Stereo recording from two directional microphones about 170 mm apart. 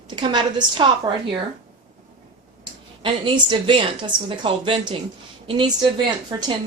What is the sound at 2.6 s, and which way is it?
A woman's voice, 25° right (ahead or behind).